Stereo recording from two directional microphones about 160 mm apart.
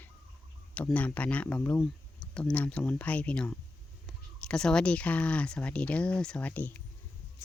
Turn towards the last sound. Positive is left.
turn(degrees=10)  # may be behind; listen again after turning